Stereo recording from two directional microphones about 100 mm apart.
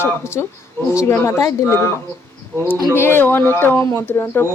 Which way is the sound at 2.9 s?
20° left (ahead or behind).